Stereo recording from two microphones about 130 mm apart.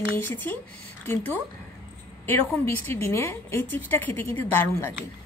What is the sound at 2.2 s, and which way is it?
A woman's voice, 15° left (ahead or behind).